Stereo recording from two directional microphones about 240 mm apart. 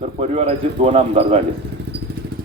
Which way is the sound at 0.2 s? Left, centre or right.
Right.